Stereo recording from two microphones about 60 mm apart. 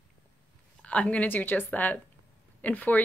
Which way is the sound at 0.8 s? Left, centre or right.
Left.